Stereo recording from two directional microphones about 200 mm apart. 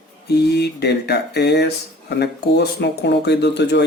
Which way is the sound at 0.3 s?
55° left (ahead or behind).